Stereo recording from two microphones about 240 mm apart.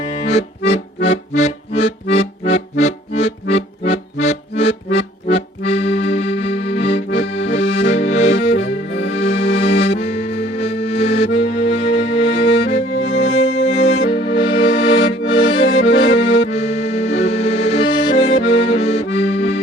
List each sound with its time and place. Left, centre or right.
0.1 s accordion: left
13.0 s music: left
13.3 s music: centre
13.6 s music: left
15.6 s accordion: left
16.3 s accordion: left